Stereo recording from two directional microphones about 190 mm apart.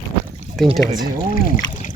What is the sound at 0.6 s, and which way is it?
Speech, centre (ahead or behind).